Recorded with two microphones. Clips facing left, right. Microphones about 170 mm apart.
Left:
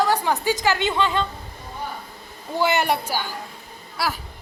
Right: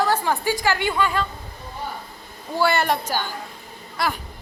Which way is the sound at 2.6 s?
15° left (ahead or behind).